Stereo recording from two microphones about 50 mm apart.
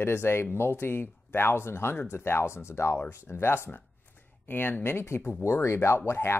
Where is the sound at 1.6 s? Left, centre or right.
Left.